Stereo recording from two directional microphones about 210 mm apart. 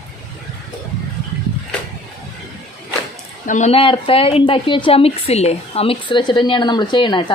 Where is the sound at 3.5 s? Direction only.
35° left (ahead or behind).